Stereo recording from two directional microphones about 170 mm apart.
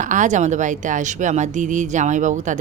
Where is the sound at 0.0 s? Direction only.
45° right (ahead or behind).